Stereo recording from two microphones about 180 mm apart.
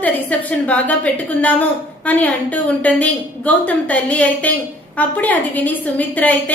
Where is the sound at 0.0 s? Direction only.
10° left (ahead or behind).